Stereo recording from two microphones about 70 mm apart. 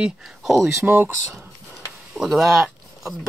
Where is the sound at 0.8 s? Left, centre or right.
Right.